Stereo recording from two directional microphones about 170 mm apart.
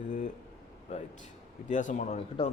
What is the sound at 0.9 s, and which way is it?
Speech, 40° left (ahead or behind).